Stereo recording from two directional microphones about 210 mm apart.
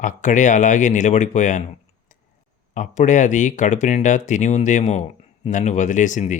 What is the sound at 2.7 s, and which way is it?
Speech, 35° left (ahead or behind).